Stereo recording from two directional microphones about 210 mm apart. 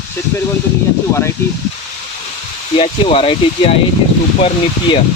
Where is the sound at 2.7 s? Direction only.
25° left (ahead or behind).